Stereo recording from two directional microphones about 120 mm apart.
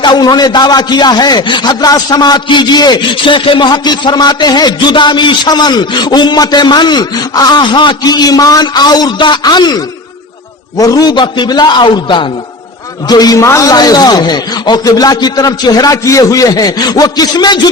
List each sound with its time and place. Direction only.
0.0 s a man's voice: 35° left (ahead or behind)